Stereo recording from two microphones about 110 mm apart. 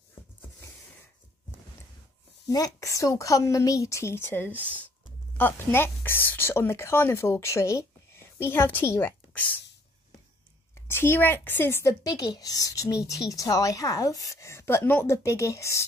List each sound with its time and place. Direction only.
2.4 s a woman's voice: 30° left (ahead or behind)
9.3 s speech: 10° left (ahead or behind)
10.7 s a woman's voice: 20° left (ahead or behind)